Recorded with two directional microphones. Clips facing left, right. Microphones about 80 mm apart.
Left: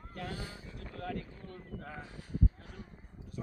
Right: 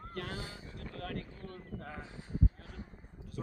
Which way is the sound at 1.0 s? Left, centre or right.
Right.